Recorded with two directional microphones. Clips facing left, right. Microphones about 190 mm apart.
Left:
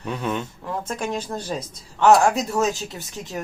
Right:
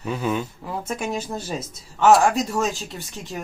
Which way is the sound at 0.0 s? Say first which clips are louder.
Right 2 dB; 5° right (ahead or behind).